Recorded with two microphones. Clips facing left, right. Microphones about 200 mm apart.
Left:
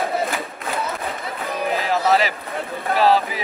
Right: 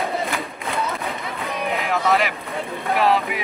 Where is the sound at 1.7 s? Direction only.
35° left (ahead or behind).